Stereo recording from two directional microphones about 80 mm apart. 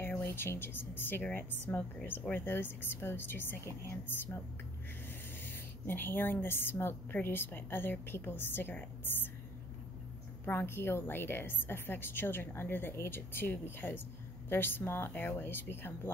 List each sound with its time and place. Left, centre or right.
0.0 s a woman's voice: left
5.4 s a woman's voice: left
10.4 s a woman's voice: left